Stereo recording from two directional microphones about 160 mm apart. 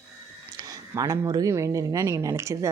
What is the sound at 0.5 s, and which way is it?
Speech, 20° right (ahead or behind).